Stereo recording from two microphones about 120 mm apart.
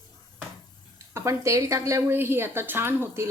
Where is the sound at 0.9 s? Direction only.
25° right (ahead or behind).